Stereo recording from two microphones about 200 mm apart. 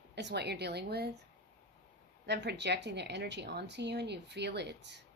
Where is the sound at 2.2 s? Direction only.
60° right (ahead or behind).